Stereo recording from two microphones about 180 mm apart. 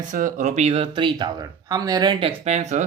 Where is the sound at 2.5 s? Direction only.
40° right (ahead or behind).